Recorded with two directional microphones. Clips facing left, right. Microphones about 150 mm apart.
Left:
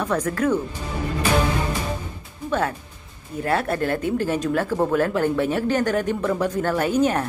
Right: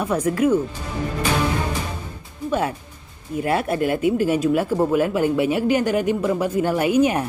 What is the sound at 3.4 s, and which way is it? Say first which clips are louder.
Speech: right 1 dB; 15° right (ahead or behind).